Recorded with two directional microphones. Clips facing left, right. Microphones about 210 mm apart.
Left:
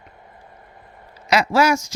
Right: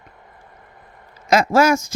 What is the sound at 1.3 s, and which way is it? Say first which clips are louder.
Speech: right 2 dB; 50° right (ahead or behind).